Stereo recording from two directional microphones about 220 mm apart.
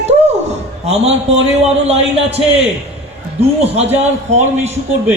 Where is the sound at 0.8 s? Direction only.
30° right (ahead or behind).